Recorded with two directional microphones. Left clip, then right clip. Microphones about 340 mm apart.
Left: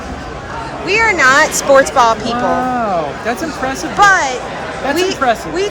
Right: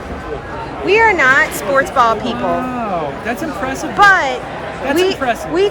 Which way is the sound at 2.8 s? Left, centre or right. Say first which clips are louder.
Left 3 dB; centre.